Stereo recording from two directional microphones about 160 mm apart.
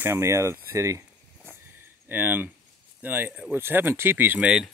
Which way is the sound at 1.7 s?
15° right (ahead or behind).